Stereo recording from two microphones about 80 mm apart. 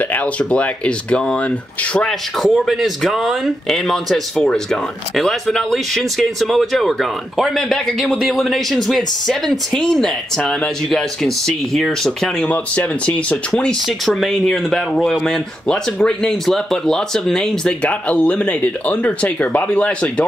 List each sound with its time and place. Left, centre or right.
0.1 s speech: centre
2.0 s speech: centre
13.8 s speech: centre
17.8 s speech: centre